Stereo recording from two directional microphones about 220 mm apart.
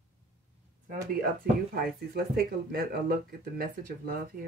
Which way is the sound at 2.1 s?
45° right (ahead or behind).